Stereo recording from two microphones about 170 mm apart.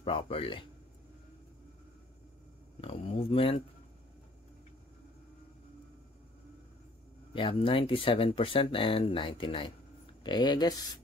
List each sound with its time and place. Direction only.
0.0 s speech: 35° left (ahead or behind)
2.8 s speech: 35° left (ahead or behind)
7.3 s speech: 30° left (ahead or behind)